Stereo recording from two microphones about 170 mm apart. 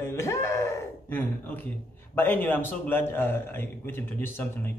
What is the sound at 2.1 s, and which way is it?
A man's voice, 10° left (ahead or behind).